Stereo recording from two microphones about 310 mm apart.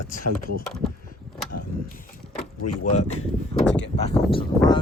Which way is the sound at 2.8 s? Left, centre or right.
Left.